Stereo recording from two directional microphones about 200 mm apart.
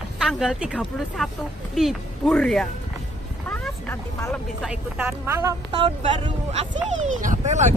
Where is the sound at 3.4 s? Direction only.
10° left (ahead or behind).